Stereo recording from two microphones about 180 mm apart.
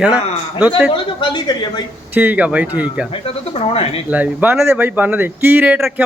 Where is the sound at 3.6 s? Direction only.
30° left (ahead or behind).